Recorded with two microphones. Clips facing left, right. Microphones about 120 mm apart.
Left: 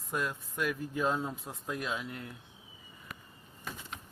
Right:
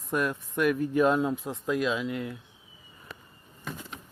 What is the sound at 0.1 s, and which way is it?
Speech, 75° right (ahead or behind).